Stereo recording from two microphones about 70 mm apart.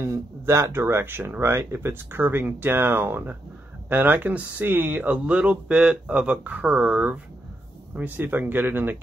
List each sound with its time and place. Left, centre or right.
0.0 s speech: right
4.9 s speech: centre; by 8.9 s right